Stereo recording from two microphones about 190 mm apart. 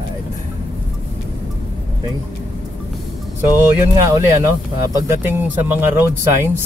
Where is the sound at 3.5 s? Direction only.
20° right (ahead or behind).